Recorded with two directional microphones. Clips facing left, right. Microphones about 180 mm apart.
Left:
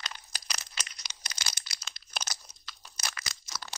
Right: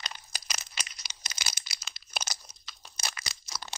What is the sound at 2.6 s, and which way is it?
Crunch, 20° right (ahead or behind).